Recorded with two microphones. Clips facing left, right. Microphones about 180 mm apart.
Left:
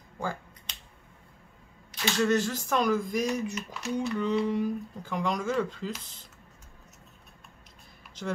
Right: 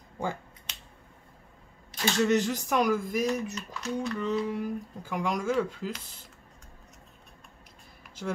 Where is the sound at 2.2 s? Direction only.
15° right (ahead or behind).